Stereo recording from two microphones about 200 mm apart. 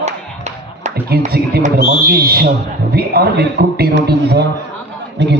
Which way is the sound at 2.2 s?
50° right (ahead or behind).